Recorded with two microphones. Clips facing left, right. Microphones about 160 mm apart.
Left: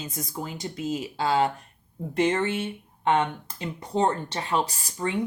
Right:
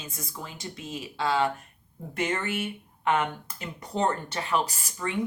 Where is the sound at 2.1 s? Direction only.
30° left (ahead or behind).